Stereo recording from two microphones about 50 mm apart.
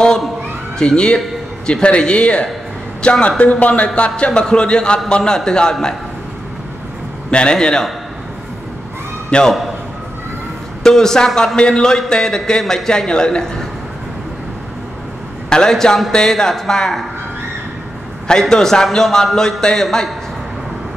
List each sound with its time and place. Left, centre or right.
0.7 s a man's voice: centre
7.2 s a man's voice: centre
9.3 s a man's voice: centre
10.8 s a man's voice: centre
15.5 s a man's voice: centre
18.2 s a man's voice: centre